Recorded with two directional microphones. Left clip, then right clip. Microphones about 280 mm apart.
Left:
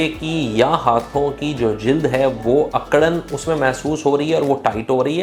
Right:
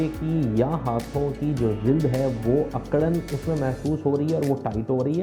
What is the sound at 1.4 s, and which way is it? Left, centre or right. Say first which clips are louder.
Speech: left 6 dB; centre.